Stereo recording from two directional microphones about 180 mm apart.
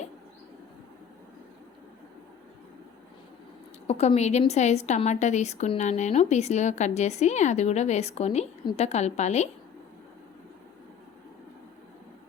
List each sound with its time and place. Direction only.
3.8 s a woman's voice: 35° left (ahead or behind)